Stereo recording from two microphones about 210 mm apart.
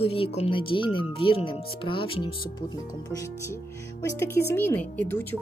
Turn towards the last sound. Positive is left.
turn(degrees=10)  # may be behind; listen again after turning